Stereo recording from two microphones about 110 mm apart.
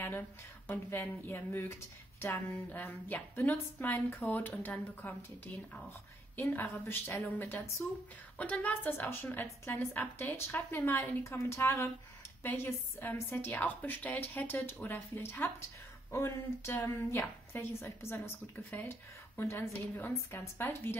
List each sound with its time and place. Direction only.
0.7 s a woman's voice: 20° left (ahead or behind)
6.3 s a woman's voice: 20° left (ahead or behind)